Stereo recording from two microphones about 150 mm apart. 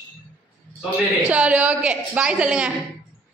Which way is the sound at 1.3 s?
10° right (ahead or behind).